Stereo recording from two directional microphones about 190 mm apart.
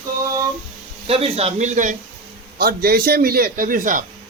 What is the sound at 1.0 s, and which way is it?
Speech, 30° right (ahead or behind).